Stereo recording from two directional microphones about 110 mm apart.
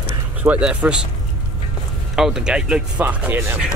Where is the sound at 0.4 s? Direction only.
10° right (ahead or behind).